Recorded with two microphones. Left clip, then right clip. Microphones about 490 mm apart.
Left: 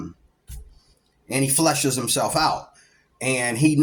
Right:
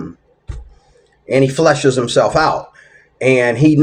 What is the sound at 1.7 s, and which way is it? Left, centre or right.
Speech, left.